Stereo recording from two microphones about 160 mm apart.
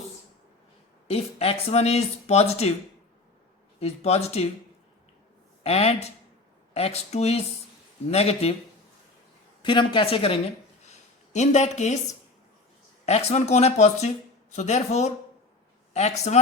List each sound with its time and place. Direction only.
1.0 s speech: 40° left (ahead or behind)
3.8 s speech: 40° left (ahead or behind)
5.6 s speech: 40° left (ahead or behind)
9.6 s speech: 30° left (ahead or behind)
10.8 s a sound: 45° left (ahead or behind)
13.1 s speech: 40° left (ahead or behind)